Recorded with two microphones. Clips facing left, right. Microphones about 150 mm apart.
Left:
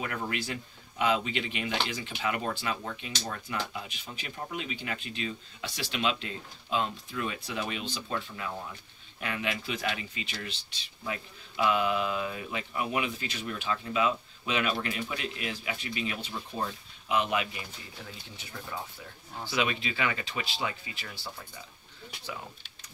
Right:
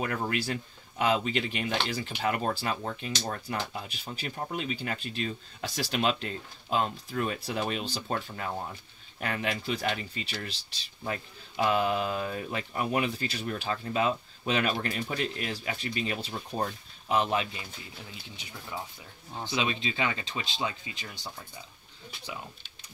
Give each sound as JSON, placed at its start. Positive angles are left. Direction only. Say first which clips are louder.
{"t": 0.0, "sound": "speech", "louder": "right 3 dB", "side_deg": -45}
{"t": 19.3, "sound": "speech", "louder": "even", "side_deg": -25}